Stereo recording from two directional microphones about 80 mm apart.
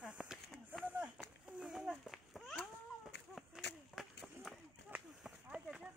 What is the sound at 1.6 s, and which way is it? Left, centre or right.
Children playing, centre.